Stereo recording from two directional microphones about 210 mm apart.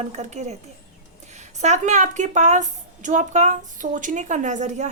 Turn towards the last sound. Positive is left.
turn(degrees=-35)  # may be behind; listen again after turning